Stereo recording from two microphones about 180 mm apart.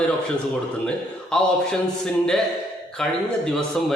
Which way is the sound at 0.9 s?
5° left (ahead or behind).